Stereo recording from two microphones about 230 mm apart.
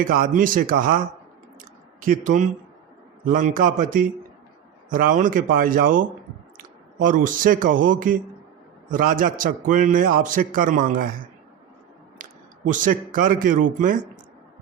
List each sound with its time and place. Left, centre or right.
0.0 s a man's voice: right
12.7 s a man's voice: right